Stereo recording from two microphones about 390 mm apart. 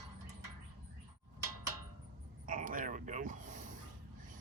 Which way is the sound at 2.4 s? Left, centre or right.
Centre.